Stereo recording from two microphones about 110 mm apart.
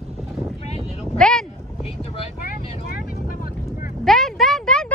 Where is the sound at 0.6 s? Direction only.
70° left (ahead or behind).